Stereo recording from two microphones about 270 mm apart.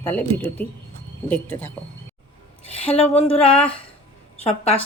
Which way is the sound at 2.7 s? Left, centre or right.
Left.